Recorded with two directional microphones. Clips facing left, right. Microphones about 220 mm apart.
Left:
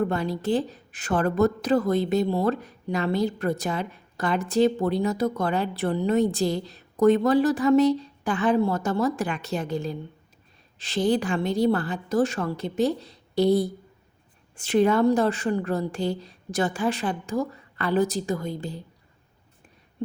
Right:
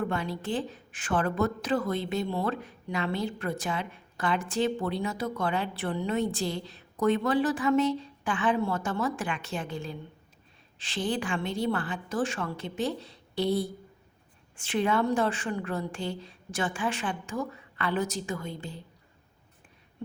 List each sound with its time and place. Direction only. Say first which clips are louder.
0.0 s a woman's voice: left 6 dB; 40° left (ahead or behind)